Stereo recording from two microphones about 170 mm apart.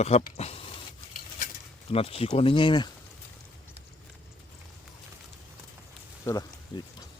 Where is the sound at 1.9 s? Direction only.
35° left (ahead or behind).